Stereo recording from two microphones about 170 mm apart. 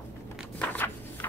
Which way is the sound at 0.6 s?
10° left (ahead or behind).